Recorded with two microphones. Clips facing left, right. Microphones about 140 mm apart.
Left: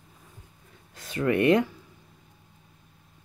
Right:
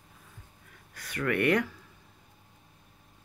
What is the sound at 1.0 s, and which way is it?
Speech, 25° left (ahead or behind).